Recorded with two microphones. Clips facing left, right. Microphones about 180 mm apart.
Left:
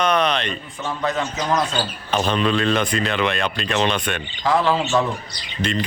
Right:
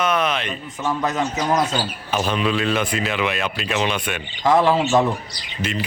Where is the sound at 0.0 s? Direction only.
5° right (ahead or behind).